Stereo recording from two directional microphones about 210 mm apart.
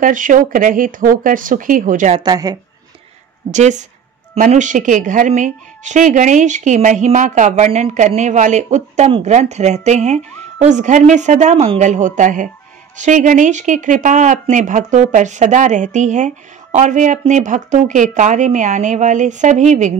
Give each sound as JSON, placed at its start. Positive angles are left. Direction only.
{"t": 0.0, "sound": "a woman's voice", "side_deg": -40}
{"t": 2.1, "sound": "a woman's voice", "side_deg": -20}
{"t": 3.5, "sound": "a woman's voice", "side_deg": -35}